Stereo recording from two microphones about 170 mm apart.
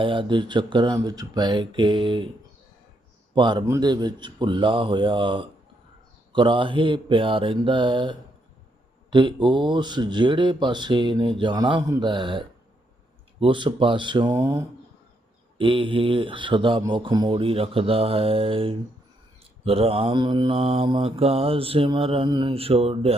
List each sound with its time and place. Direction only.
0.0 s speech: 30° right (ahead or behind)
3.3 s speech: 25° right (ahead or behind)
15.5 s speech: 30° right (ahead or behind)
16.8 s mantra: 25° right (ahead or behind)